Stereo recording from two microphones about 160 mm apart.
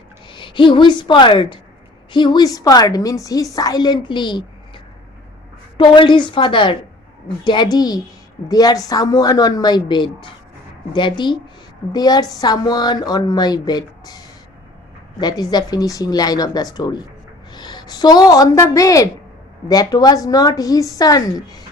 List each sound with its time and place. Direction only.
0.3 s a woman's voice: 30° left (ahead or behind)